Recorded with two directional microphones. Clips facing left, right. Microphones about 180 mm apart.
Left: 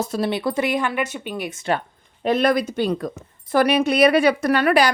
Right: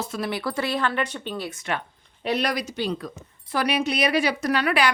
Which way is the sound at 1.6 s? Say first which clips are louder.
Left 6 dB; 40° left (ahead or behind).